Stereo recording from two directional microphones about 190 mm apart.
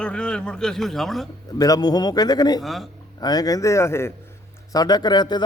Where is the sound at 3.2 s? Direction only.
20° left (ahead or behind).